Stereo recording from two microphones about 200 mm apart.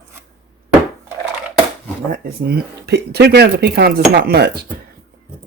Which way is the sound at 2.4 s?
55° right (ahead or behind).